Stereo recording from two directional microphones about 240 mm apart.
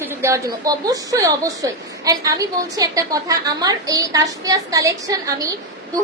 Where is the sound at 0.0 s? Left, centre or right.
Centre.